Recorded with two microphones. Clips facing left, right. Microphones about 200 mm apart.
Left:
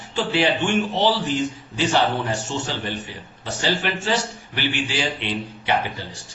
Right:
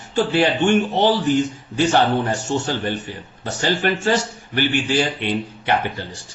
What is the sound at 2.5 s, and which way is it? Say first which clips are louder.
A man's voice: right 5 dB; 50° right (ahead or behind).